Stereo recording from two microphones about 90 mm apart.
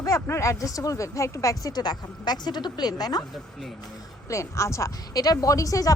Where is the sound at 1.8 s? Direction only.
50° left (ahead or behind).